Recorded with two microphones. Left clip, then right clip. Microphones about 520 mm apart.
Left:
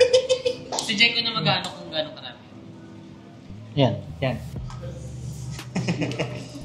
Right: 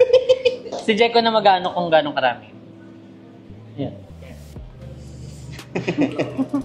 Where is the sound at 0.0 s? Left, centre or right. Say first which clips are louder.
Right 4 dB; right.